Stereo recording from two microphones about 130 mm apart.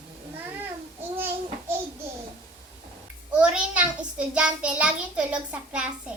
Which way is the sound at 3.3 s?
10° right (ahead or behind).